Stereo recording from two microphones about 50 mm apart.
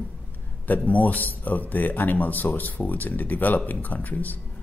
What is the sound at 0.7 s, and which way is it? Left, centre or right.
Speech, left.